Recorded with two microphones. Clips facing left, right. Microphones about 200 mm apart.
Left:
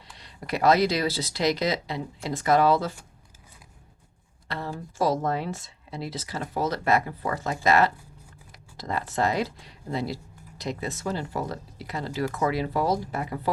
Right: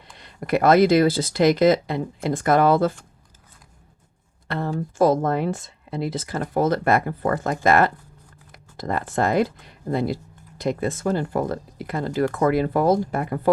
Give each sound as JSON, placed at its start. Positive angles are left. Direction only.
{"t": 0.1, "sound": "speech", "side_deg": -55}
{"t": 4.4, "sound": "speech", "side_deg": -50}